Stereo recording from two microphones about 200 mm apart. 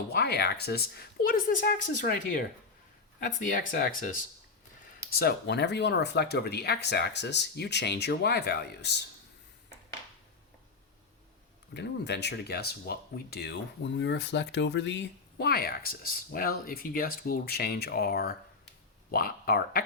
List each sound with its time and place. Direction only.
0.1 s speech: 50° left (ahead or behind)
3.5 s speech: 45° left (ahead or behind)
5.1 s speech: 55° left (ahead or behind)
11.7 s speech: 60° left (ahead or behind)